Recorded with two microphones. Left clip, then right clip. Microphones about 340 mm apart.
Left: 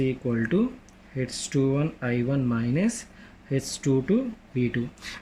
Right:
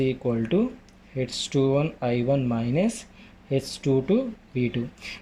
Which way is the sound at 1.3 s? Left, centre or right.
Centre.